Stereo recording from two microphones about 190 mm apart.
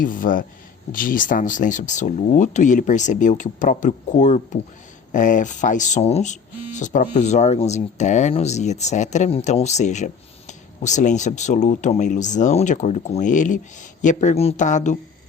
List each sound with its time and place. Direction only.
0.0 s speech: 45° left (ahead or behind)